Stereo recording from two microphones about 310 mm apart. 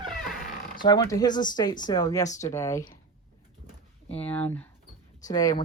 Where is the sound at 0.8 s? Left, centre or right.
Centre.